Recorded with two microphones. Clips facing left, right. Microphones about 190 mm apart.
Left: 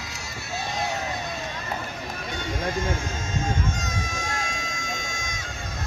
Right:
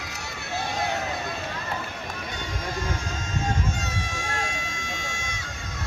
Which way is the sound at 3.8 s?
40° left (ahead or behind).